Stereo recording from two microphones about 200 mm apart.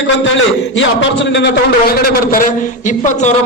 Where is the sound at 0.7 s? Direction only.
65° left (ahead or behind); by 3.3 s 40° left (ahead or behind).